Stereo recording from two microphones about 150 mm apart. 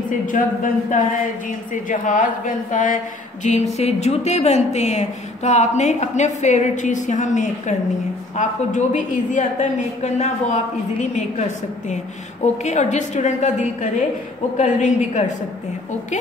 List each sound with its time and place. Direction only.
0.3 s a woman's voice: 60° left (ahead or behind)
3.4 s a woman's voice: 50° left (ahead or behind)
12.6 s a woman's voice: 50° left (ahead or behind)